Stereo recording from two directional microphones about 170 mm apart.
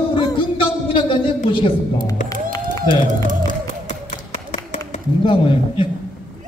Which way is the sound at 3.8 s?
50° left (ahead or behind).